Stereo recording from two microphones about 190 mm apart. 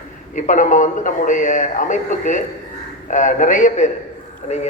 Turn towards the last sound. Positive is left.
turn(degrees=35)  # may be behind; listen again after turning